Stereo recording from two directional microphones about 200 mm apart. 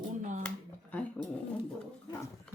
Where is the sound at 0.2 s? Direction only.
35° right (ahead or behind).